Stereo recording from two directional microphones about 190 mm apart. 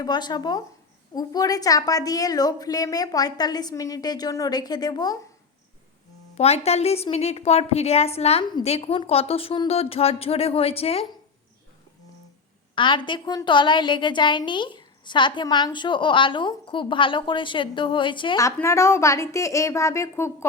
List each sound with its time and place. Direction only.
0.0 s a woman's voice: 20° left (ahead or behind)
6.3 s a woman's voice: 35° left (ahead or behind)
12.7 s a woman's voice: 25° left (ahead or behind)